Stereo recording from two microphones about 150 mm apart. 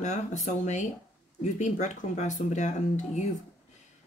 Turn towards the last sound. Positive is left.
turn(degrees=50)  # may be behind; listen again after turning